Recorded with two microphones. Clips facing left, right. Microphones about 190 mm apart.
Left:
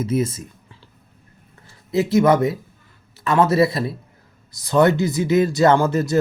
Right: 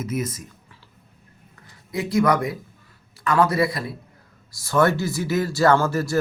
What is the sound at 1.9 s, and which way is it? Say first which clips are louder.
Speech: left 5 dB; 25° left (ahead or behind).